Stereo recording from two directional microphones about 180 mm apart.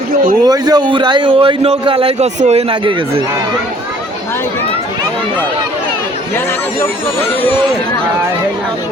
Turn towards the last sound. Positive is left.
turn(degrees=15)  # may be behind; listen again after turning